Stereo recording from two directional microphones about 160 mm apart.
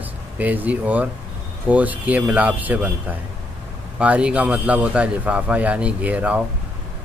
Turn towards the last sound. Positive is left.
turn(degrees=-10)  # may be behind; listen again after turning